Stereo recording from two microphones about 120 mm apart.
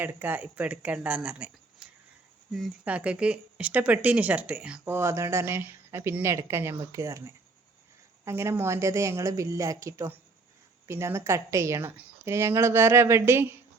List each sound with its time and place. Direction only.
0.0 s speech: 15° right (ahead or behind)
2.8 s speech: 10° right (ahead or behind)
4.9 s a woman's voice: 20° right (ahead or behind)